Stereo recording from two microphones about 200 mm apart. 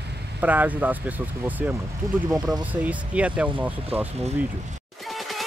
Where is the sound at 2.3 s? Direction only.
5° right (ahead or behind).